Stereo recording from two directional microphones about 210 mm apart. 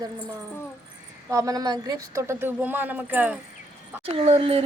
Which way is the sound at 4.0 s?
25° right (ahead or behind).